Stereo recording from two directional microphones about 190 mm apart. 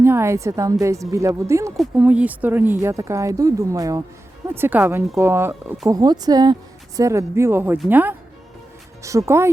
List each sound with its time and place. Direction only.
0.0 s speech: 15° right (ahead or behind)
1.7 s speech: 5° right (ahead or behind)